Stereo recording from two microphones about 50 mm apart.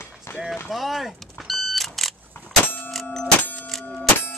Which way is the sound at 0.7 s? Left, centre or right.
Centre.